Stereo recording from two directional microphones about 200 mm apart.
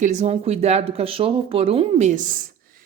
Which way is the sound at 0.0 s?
35° right (ahead or behind).